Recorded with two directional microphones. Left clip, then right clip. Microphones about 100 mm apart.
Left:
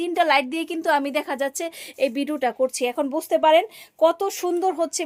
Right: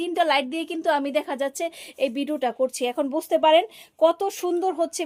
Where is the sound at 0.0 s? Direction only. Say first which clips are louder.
Left 2 dB; 20° left (ahead or behind).